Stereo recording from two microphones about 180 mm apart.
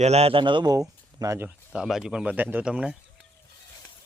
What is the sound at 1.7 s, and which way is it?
Speech, 5° right (ahead or behind).